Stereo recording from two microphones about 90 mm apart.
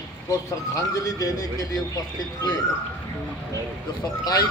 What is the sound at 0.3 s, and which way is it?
A man's voice, 40° left (ahead or behind).